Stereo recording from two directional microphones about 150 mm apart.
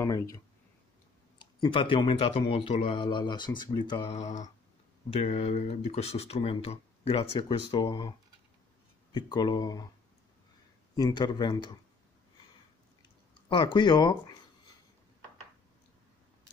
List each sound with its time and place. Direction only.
0.0 s speech: 20° left (ahead or behind)
1.4 s speech: 35° left (ahead or behind)
4.1 s mantra: 50° left (ahead or behind)
5.1 s speech: 45° left (ahead or behind); by 8.1 s 30° left (ahead or behind)
9.1 s speech: 30° left (ahead or behind)
11.0 s speech: 25° left (ahead or behind)
13.5 s speech: 30° left (ahead or behind)